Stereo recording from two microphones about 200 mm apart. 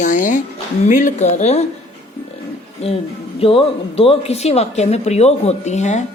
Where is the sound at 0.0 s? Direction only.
40° left (ahead or behind).